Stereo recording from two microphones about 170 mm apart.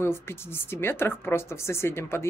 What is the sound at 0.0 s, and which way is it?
A woman's voice, 15° left (ahead or behind).